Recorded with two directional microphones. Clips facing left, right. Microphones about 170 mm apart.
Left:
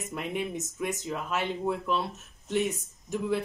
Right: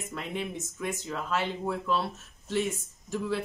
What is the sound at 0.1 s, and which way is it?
Speech, 20° left (ahead or behind).